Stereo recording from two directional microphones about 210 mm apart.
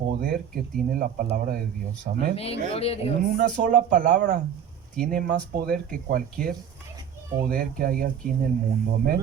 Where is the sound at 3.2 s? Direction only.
40° right (ahead or behind).